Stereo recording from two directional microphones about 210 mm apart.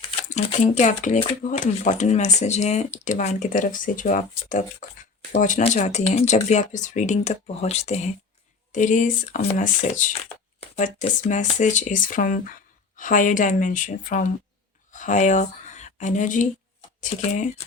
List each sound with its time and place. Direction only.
0.3 s speech: 35° left (ahead or behind)